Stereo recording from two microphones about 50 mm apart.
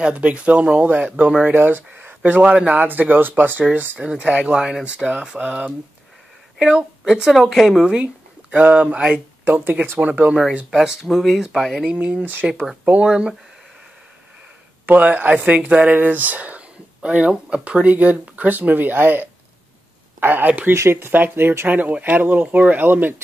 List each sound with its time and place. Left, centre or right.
0.0 s speech: right
4.0 s speech: centre
7.1 s speech: centre
7.9 s a sound: right
8.9 s speech: right
9.7 s speech: right
9.9 s speech: right
10.7 s speech: centre
11.0 s speech: centre
12.0 s speech: right
14.9 s speech: right
21.6 s speech: right